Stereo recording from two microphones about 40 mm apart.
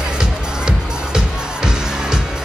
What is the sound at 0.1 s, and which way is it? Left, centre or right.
Music, centre.